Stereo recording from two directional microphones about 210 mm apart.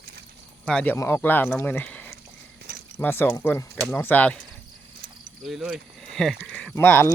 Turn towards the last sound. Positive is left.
turn(degrees=10)  # may be behind; listen again after turning